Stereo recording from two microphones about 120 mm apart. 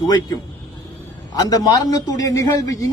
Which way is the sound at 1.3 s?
30° left (ahead or behind).